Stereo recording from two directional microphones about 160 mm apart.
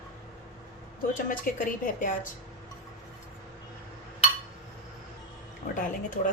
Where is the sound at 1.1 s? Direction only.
55° left (ahead or behind).